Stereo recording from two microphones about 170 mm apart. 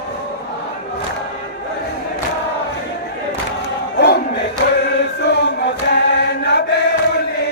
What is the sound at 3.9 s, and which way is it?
Battle cry, 80° left.